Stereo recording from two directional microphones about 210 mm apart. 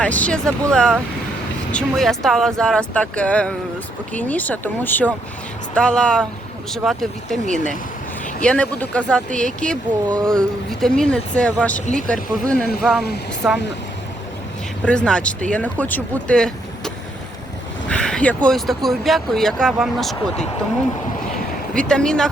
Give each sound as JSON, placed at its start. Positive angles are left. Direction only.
{"t": 0.0, "sound": "speech", "side_deg": 5}
{"t": 14.8, "sound": "speech", "side_deg": 5}
{"t": 21.7, "sound": "speech", "side_deg": 5}